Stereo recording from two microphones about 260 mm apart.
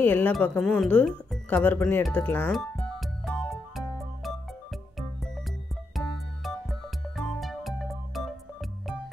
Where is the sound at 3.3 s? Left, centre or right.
Centre.